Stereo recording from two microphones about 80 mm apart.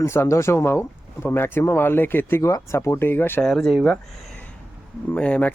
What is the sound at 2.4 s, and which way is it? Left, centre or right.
Speech, left.